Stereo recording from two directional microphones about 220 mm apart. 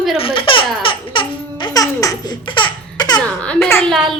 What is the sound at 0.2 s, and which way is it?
Laughter, 25° left (ahead or behind).